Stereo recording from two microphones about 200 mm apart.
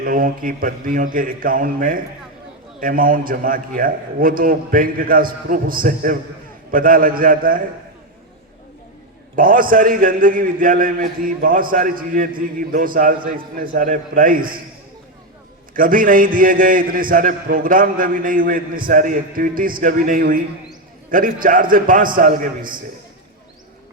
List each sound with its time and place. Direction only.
0.0 s a man's voice: 45° right (ahead or behind)
9.3 s a man's voice: 45° right (ahead or behind)
15.7 s a man's voice: 45° right (ahead or behind)